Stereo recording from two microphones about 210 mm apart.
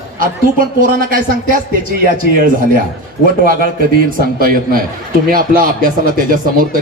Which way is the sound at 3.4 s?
40° right (ahead or behind).